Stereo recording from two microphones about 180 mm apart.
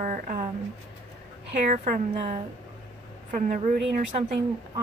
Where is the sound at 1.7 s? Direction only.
40° right (ahead or behind).